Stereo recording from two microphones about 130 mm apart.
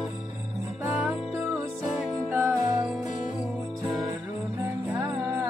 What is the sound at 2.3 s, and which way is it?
Music, 20° right (ahead or behind).